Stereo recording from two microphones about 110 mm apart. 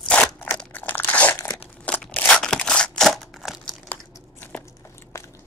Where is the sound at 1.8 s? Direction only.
15° left (ahead or behind).